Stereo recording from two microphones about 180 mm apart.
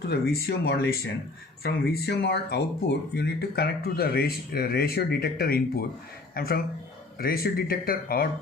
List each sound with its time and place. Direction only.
0.1 s speech: 60° left (ahead or behind)